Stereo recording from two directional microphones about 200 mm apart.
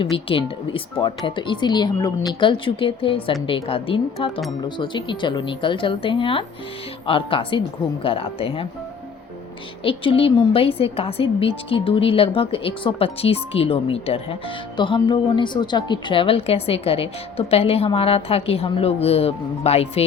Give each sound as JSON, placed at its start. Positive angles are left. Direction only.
{"t": 0.0, "sound": "a woman's voice", "side_deg": 25}
{"t": 9.8, "sound": "a woman's voice", "side_deg": 25}